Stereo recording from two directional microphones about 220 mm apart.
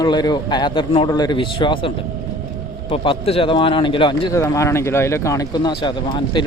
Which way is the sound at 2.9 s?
25° left (ahead or behind).